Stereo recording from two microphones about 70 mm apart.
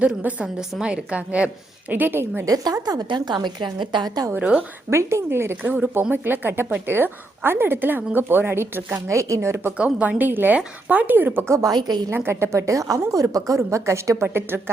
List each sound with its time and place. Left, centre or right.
0.0 s a woman's voice: right
0.4 s a woman's voice: centre
1.9 s a woman's voice: right
2.6 s a woman's voice: right
4.3 s a woman's voice: right
4.9 s a woman's voice: right
9.0 s a woman's voice: right
9.7 s a woman's voice: centre
11.4 s a woman's voice: right
11.7 s a woman's voice: right
12.1 s a woman's voice: right